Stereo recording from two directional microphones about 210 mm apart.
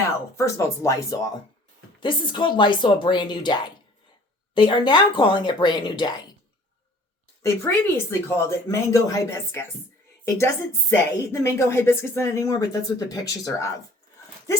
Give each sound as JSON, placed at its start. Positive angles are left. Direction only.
{"t": 0.3, "sound": "a woman's voice", "side_deg": 15}
{"t": 7.9, "sound": "speech", "side_deg": 10}